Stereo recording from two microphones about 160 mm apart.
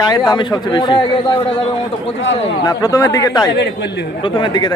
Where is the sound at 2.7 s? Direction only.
20° left (ahead or behind).